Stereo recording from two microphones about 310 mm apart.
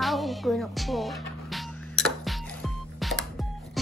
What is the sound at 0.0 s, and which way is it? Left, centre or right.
Music, centre.